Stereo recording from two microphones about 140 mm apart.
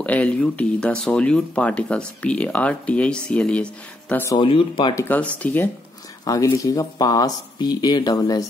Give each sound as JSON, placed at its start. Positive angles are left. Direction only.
{"t": 0.0, "sound": "speech", "side_deg": 10}
{"t": 4.4, "sound": "speech", "side_deg": 35}
{"t": 4.9, "sound": "speech", "side_deg": 15}
{"t": 6.2, "sound": "speech", "side_deg": 25}